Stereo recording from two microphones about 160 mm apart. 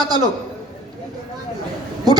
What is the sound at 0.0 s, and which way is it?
Speech, 25° right (ahead or behind).